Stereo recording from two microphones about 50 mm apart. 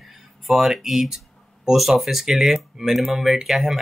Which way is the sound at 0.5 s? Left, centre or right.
Centre.